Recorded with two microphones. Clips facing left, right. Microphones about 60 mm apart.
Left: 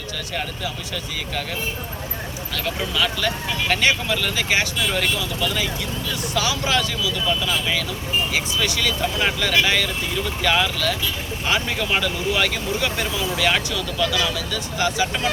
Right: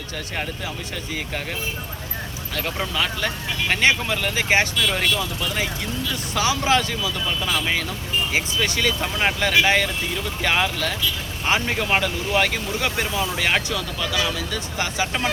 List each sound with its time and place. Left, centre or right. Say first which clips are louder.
2.9 s speech: left 4 dB; right
6.3 s speech: right 2 dB; right